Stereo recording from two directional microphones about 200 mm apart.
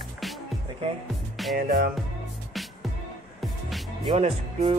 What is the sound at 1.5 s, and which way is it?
Music, 50° right (ahead or behind).